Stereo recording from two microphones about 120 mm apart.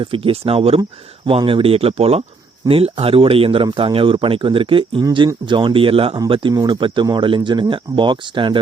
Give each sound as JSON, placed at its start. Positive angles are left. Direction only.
{"t": 0.0, "sound": "speech", "side_deg": -50}